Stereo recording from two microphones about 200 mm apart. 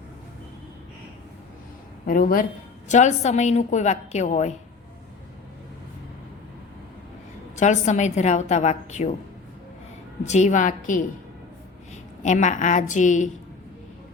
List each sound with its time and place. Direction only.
2.0 s a woman's voice: 45° left (ahead or behind)
7.6 s a woman's voice: 35° left (ahead or behind)
10.2 s a woman's voice: 35° left (ahead or behind)
12.2 s a woman's voice: 35° left (ahead or behind)